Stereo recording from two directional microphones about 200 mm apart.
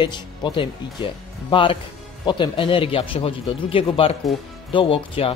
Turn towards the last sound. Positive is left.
turn(degrees=25)  # may be behind; listen again after turning